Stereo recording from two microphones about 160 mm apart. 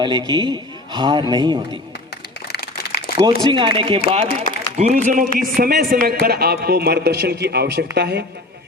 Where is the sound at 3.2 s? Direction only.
30° right (ahead or behind).